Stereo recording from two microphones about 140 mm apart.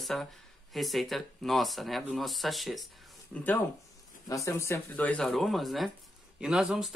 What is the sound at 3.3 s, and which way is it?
Speech, 10° left (ahead or behind).